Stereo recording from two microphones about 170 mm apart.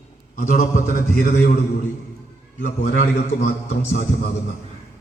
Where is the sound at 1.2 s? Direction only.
60° left (ahead or behind).